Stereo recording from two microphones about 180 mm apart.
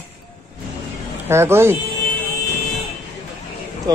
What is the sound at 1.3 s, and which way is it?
Speech, 15° right (ahead or behind).